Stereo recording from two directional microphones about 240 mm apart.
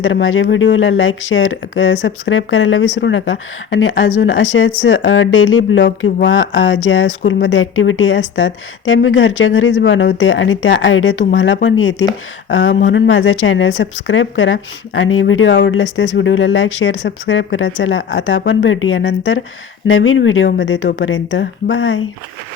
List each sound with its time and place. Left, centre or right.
0.0 s speech: left